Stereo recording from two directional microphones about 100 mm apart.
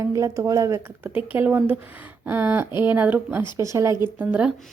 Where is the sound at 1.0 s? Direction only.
20° right (ahead or behind).